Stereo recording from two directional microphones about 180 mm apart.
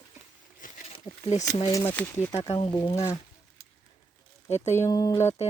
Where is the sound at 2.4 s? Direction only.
25° left (ahead or behind).